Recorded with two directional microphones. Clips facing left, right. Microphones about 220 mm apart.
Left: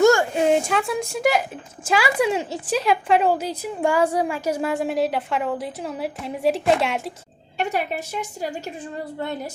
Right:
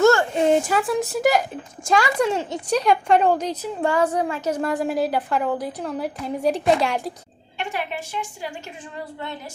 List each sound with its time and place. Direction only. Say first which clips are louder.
0.0 s a sound: left 1 dB; 15° left (ahead or behind)
0.3 s a woman's voice: right 1 dB; centre (ahead or behind)
7.6 s a woman's voice: left 4 dB; 40° left (ahead or behind)